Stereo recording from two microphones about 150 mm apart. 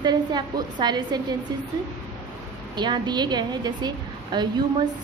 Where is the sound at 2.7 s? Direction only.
30° right (ahead or behind).